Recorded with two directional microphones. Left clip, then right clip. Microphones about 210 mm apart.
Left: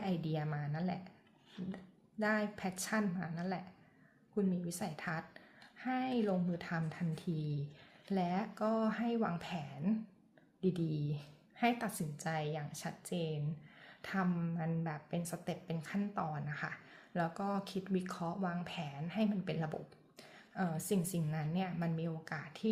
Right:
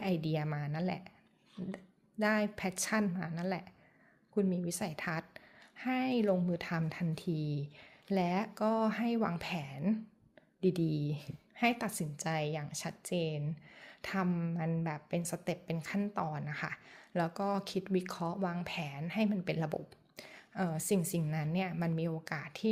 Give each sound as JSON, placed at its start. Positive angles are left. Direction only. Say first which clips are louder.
{"t": 0.0, "sound": "a woman's voice", "louder": "right 4 dB", "side_deg": -35}